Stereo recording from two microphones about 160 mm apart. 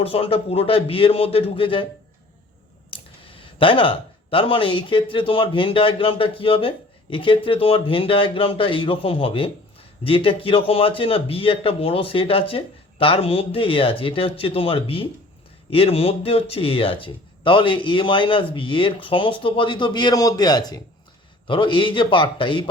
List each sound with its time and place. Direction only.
0.0 s speech: 35° left (ahead or behind)
2.9 s speech: 35° left (ahead or behind)